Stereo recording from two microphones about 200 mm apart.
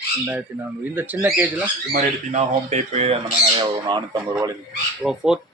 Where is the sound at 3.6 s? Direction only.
20° right (ahead or behind).